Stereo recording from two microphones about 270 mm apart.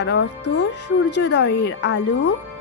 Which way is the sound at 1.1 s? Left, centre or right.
Left.